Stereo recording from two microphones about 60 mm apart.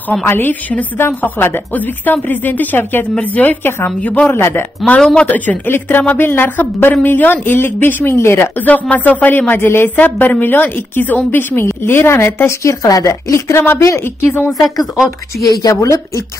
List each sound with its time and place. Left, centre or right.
0.2 s a woman's voice: left
4.3 s speech: left
5.2 s a woman's voice: left
8.5 s a woman's voice: left
9.5 s speech: left
11.6 s speech: left
13.3 s speech: left
14.6 s speech: centre
15.4 s speech: left